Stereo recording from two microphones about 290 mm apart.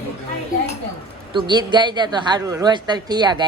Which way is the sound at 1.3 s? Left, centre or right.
Centre.